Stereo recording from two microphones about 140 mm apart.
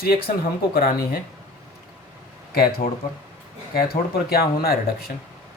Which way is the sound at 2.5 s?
90° left.